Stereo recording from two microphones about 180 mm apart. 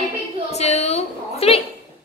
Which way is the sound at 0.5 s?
35° left (ahead or behind).